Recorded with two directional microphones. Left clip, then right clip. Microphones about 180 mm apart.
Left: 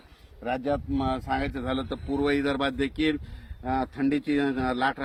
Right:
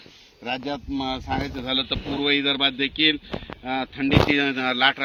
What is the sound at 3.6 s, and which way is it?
Speech, 20° right (ahead or behind).